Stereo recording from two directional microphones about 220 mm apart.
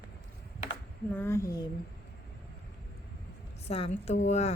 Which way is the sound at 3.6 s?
25° left (ahead or behind).